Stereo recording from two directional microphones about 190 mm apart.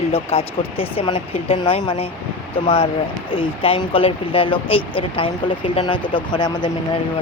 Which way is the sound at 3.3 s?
30° left (ahead or behind).